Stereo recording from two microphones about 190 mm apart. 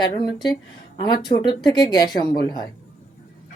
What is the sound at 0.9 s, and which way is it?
Speech, 25° left (ahead or behind).